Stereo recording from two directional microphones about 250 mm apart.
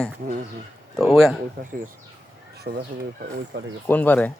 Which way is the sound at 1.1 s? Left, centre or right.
Centre.